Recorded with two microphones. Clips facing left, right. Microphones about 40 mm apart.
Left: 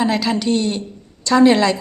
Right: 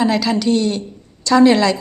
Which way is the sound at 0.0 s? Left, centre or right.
Left.